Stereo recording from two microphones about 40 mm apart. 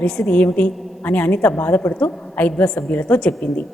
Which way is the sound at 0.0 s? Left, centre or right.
Left.